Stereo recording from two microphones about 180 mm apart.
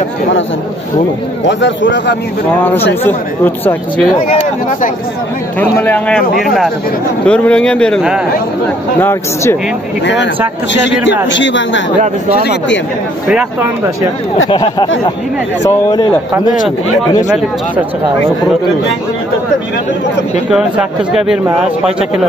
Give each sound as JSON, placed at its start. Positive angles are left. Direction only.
{"t": 1.4, "sound": "a man's voice", "side_deg": 85}
{"t": 2.6, "sound": "speech", "side_deg": 10}
{"t": 4.3, "sound": "speech", "side_deg": 45}
{"t": 5.6, "sound": "speech", "side_deg": 10}
{"t": 9.0, "sound": "speech", "side_deg": 15}
{"t": 10.0, "sound": "a man's voice", "side_deg": 80}
{"t": 13.3, "sound": "speech", "side_deg": -5}
{"t": 14.5, "sound": "speech", "side_deg": 25}
{"t": 20.5, "sound": "speech", "side_deg": -5}